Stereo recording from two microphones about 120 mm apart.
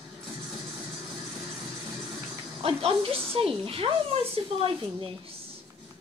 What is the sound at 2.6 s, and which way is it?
Speech, 55° right (ahead or behind).